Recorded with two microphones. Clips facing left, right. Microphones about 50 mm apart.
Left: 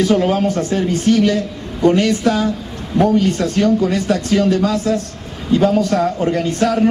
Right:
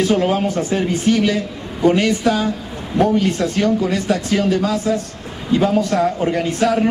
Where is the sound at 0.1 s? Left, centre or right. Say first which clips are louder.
Left 2 dB; centre.